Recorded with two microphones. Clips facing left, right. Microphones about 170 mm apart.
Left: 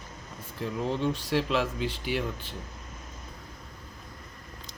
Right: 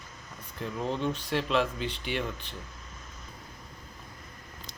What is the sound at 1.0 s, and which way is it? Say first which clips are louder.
Speech: left 3 dB; 10° left (ahead or behind).